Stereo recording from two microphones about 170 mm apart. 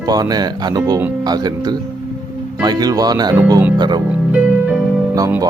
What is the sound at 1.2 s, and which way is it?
Speech, 25° right (ahead or behind).